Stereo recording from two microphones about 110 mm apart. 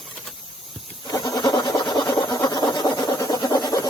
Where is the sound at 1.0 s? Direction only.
35° left (ahead or behind).